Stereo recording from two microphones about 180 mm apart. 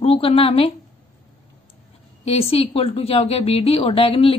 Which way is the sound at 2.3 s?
35° left (ahead or behind).